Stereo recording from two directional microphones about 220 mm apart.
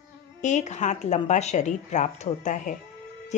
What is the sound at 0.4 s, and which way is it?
A woman's voice, 35° left (ahead or behind).